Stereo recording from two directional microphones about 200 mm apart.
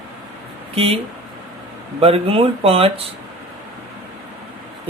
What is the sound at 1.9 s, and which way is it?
Speech, 30° right (ahead or behind).